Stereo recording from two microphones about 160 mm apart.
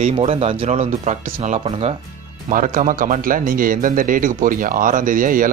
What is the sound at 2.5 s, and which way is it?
A man's voice, 55° right (ahead or behind).